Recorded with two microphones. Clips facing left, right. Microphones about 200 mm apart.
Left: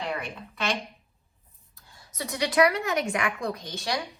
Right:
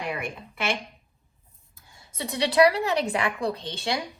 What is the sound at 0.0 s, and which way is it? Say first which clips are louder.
Speech: right 1 dB; 10° right (ahead or behind).